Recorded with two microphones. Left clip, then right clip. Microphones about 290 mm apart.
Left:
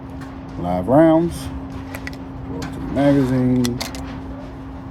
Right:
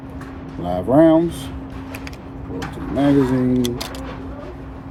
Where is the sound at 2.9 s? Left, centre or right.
Left.